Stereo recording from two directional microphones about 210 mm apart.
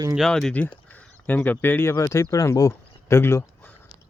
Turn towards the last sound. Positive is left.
turn(degrees=10)  # may be behind; listen again after turning